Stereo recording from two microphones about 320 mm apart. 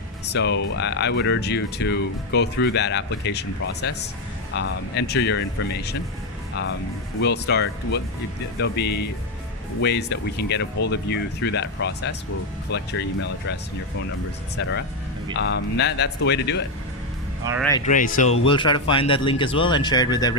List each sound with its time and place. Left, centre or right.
0.3 s speech: left
7.2 s speech: left
15.4 s speech: left
17.6 s speech: centre
17.8 s a man's voice: left